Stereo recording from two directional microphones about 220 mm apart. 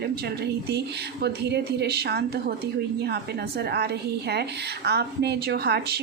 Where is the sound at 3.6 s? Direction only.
50° right (ahead or behind).